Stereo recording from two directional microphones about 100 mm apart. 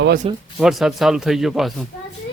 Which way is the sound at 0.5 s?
Centre (ahead or behind).